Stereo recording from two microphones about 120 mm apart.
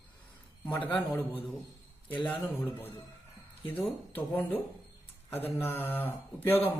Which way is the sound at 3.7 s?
15° left (ahead or behind).